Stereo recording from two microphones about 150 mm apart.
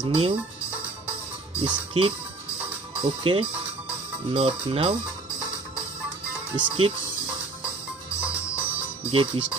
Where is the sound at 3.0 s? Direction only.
35° right (ahead or behind).